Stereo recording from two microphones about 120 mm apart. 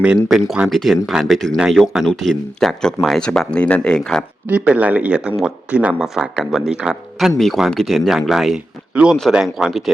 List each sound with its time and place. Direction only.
0.0 s speech: 5° right (ahead or behind)
4.4 s a man's voice: 10° right (ahead or behind)